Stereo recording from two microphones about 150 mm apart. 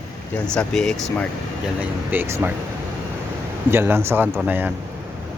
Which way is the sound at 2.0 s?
15° right (ahead or behind).